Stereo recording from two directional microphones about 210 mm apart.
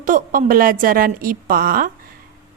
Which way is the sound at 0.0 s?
40° right (ahead or behind).